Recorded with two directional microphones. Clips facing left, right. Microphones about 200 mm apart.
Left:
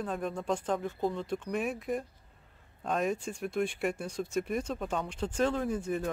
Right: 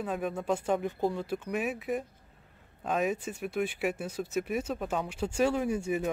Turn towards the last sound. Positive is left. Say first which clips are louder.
# right 2 dB
turn(degrees=-10)  # may be behind; listen again after turning